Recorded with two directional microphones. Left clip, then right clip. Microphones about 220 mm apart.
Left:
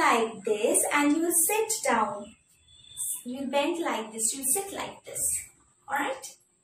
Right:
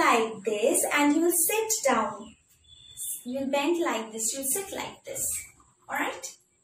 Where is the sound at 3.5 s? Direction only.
Centre (ahead or behind).